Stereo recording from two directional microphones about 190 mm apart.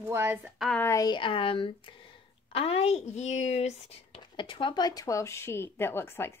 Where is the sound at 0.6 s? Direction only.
Centre (ahead or behind).